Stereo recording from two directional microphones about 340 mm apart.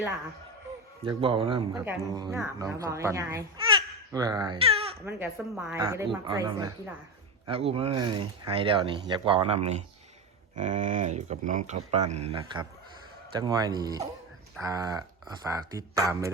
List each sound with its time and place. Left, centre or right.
1.0 s speech: centre
5.0 s speech: centre